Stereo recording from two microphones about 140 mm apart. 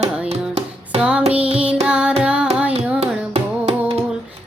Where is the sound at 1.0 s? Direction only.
5° right (ahead or behind).